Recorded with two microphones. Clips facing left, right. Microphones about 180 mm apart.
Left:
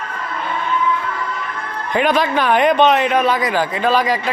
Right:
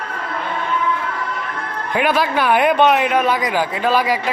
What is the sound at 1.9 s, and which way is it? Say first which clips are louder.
A man's voice: left 1 dB; 5° right (ahead or behind).